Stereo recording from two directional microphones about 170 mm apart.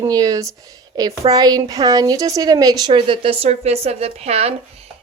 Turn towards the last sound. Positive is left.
turn(degrees=-35)  # may be behind; listen again after turning